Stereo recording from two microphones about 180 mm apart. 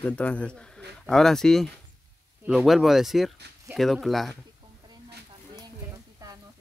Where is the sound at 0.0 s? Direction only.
5° left (ahead or behind).